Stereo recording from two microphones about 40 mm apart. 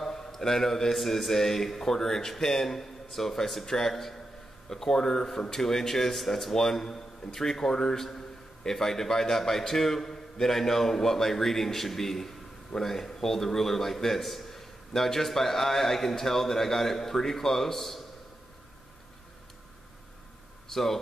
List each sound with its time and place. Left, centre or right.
0.0 s a man's voice: centre
20.6 s speech: centre